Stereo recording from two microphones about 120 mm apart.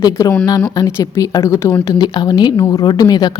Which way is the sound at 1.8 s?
35° left (ahead or behind).